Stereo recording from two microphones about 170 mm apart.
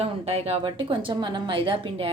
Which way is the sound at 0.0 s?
35° right (ahead or behind).